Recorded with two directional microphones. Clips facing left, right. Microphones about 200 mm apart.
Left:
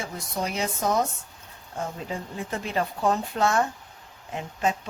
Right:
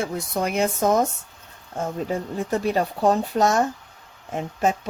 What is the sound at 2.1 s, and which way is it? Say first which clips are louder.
Speech: right 7 dB; 40° right (ahead or behind).